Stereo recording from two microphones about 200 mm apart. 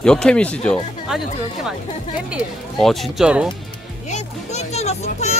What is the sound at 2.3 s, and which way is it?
Speech, centre (ahead or behind).